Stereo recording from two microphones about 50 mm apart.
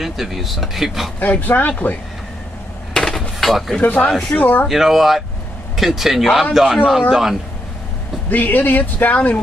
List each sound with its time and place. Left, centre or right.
0.0 s speech: centre
1.2 s speech: left
2.9 s a sound: centre
3.8 s speech: left
4.6 s speech: centre
8.3 s speech: left